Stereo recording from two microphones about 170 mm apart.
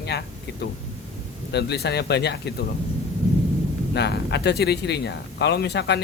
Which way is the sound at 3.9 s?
80° left.